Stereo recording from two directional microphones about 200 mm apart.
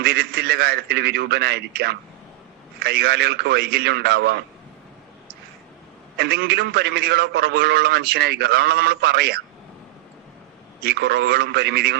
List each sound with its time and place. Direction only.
0.0 s a man's voice: 50° right (ahead or behind)
6.1 s a man's voice: 55° right (ahead or behind)
10.8 s a man's voice: 55° right (ahead or behind)